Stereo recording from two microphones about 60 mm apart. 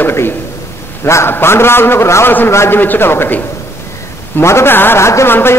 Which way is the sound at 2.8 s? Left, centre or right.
Left.